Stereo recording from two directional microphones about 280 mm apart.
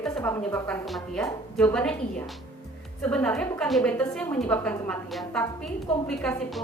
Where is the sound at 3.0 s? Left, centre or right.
Centre.